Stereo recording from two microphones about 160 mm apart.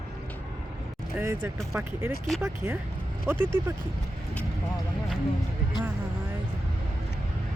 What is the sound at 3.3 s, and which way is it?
Speech, 15° right (ahead or behind).